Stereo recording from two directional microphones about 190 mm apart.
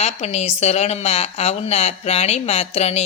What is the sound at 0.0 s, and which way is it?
A woman's voice, 35° left (ahead or behind).